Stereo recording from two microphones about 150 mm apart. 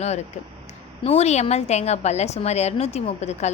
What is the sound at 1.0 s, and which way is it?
A woman's voice, 45° left (ahead or behind).